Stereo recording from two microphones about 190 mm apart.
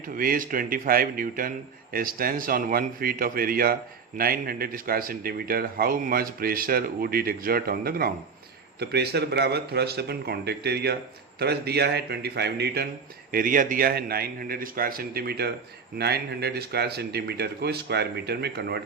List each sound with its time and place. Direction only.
0.1 s speech: 50° right (ahead or behind)
13.3 s speech: 45° right (ahead or behind)